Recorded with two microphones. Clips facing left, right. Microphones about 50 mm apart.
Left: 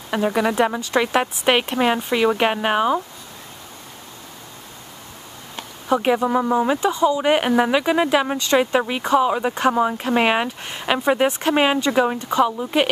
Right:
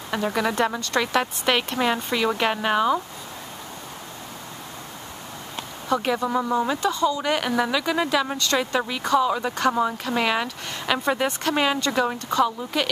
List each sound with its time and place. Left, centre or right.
0.1 s speech: centre
5.9 s speech: centre